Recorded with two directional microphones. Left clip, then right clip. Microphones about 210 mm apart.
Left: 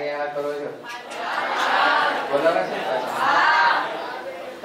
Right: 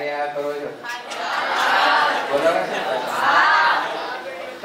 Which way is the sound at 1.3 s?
5° left (ahead or behind).